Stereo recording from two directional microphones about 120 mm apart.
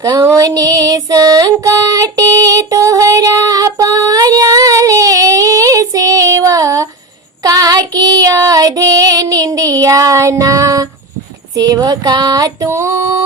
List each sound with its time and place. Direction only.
0.0 s music: 25° right (ahead or behind)
7.4 s child singing: 30° right (ahead or behind)
11.5 s a sound: 30° right (ahead or behind)